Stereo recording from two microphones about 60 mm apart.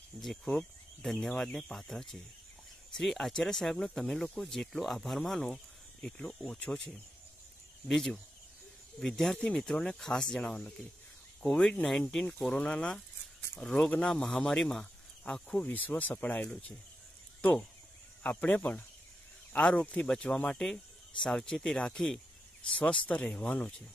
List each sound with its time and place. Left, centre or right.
0.1 s speech: centre
5.5 s speech: centre
9.0 s speech: centre
9.4 s speech: left
9.7 s speech: centre
15.6 s speech: left